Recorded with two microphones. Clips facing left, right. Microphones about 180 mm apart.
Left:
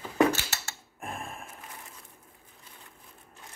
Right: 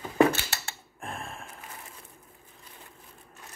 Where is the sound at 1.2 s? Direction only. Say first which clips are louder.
Even; 15° left (ahead or behind).